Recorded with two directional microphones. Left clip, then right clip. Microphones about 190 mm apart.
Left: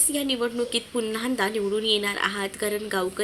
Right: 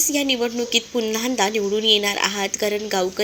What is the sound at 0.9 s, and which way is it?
A woman's voice, 10° right (ahead or behind).